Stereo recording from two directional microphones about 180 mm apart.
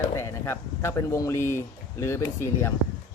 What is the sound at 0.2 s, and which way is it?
Speech, 15° left (ahead or behind).